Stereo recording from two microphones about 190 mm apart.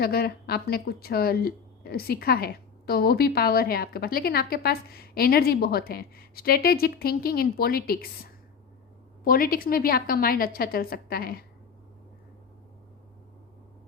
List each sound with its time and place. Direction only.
0.0 s speech: 55° left (ahead or behind)
9.2 s speech: 50° left (ahead or behind)